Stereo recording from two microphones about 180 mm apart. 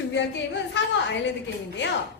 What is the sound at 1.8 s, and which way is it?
Speech, 75° left (ahead or behind).